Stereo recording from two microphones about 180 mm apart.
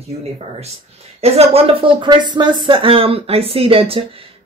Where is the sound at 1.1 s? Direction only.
35° right (ahead or behind).